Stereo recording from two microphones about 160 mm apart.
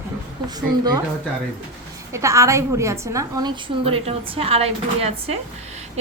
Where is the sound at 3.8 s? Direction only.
35° right (ahead or behind).